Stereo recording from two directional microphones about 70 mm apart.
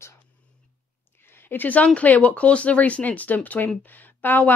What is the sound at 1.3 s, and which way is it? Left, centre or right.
Speech, left.